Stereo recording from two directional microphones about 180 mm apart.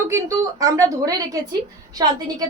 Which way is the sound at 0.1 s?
20° right (ahead or behind).